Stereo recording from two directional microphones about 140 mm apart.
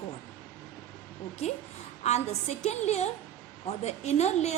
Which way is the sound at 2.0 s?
50° left (ahead or behind).